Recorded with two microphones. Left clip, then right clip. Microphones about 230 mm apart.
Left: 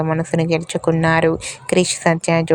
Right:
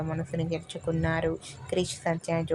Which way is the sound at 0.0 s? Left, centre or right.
Left.